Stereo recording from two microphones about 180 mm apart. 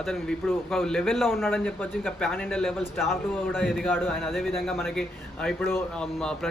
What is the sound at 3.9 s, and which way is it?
Speech, 10° left (ahead or behind).